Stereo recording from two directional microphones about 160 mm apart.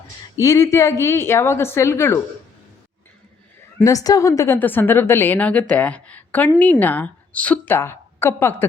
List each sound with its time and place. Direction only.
0.3 s a woman's voice: 20° left (ahead or behind)
3.8 s a woman's voice: 20° left (ahead or behind)